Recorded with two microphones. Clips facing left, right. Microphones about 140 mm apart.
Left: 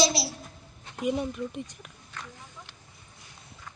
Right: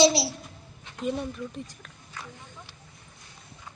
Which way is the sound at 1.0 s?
15° left (ahead or behind).